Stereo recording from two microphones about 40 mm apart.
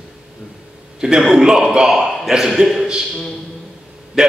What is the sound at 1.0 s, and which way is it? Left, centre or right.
Speech, centre.